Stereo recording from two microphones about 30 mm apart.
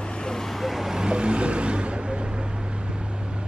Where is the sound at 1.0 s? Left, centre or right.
Right.